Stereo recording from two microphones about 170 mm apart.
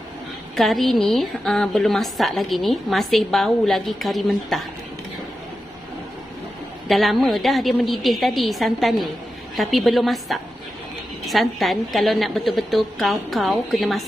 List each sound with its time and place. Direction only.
0.6 s a woman's voice: centre (ahead or behind)
6.9 s a woman's voice: centre (ahead or behind)